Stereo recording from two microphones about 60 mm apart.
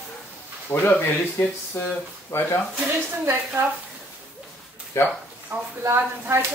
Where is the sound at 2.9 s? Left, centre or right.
Right.